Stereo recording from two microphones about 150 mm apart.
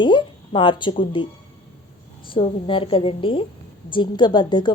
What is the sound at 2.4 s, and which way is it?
A woman's voice, 40° left (ahead or behind).